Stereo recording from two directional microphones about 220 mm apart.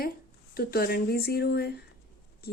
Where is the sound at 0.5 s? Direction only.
45° left (ahead or behind).